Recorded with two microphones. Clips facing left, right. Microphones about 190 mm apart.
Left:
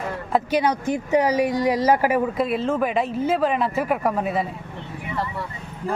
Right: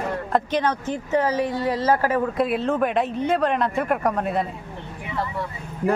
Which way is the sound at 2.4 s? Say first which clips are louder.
Even; centre (ahead or behind).